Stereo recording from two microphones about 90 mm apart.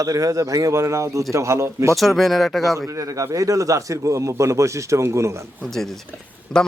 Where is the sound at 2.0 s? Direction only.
Centre (ahead or behind).